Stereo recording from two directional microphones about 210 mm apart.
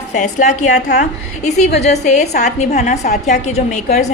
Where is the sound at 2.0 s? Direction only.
35° left (ahead or behind).